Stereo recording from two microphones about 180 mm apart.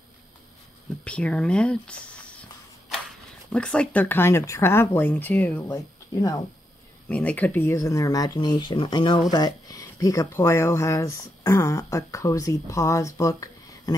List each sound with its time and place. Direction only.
1.0 s speech: 5° left (ahead or behind)
7.1 s speech: 10° left (ahead or behind)